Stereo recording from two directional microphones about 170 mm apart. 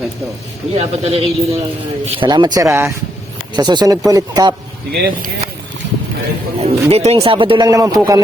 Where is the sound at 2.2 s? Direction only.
25° right (ahead or behind).